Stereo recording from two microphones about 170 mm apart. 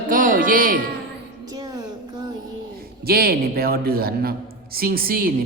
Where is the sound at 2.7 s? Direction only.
65° right (ahead or behind).